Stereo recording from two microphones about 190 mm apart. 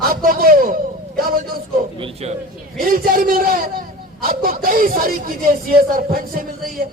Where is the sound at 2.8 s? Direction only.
50° right (ahead or behind).